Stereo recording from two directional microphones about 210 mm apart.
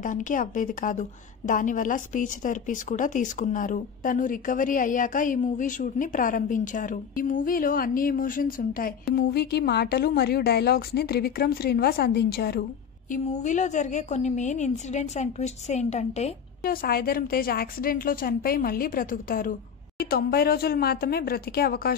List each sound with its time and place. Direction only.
0.0 s a woman's voice: 40° left (ahead or behind)
13.1 s a woman's voice: 35° left (ahead or behind)
16.6 s a woman's voice: 45° left (ahead or behind)